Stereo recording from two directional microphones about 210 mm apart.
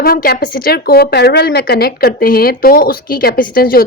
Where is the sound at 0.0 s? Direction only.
45° left (ahead or behind).